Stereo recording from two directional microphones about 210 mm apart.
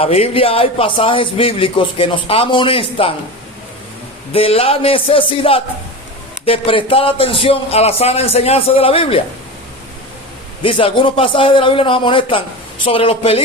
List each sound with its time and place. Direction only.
0.0 s a man's voice: 25° left (ahead or behind)
4.3 s a man's voice: 25° left (ahead or behind)
10.6 s a man's voice: 25° left (ahead or behind)